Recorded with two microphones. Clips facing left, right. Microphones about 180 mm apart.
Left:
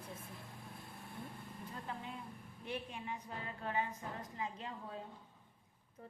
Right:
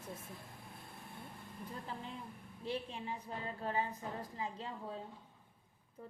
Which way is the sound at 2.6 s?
30° right (ahead or behind).